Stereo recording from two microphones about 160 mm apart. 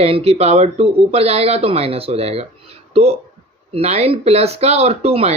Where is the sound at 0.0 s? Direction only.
40° right (ahead or behind).